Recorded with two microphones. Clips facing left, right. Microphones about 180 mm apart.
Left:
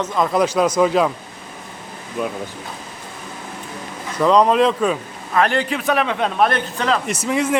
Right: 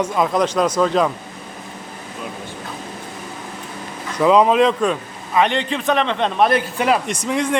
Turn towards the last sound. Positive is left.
turn(degrees=5)  # may be behind; listen again after turning